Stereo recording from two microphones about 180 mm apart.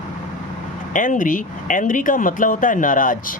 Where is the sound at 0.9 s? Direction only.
45° left (ahead or behind).